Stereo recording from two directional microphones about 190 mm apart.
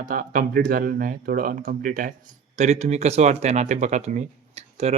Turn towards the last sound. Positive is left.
turn(degrees=-35)  # may be behind; listen again after turning